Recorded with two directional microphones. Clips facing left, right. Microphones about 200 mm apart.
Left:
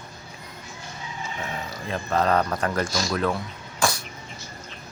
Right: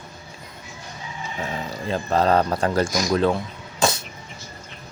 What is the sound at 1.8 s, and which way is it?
Speech, 30° right (ahead or behind).